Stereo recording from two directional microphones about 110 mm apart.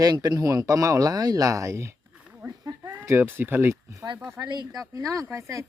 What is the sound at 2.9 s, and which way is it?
Speech, 20° right (ahead or behind).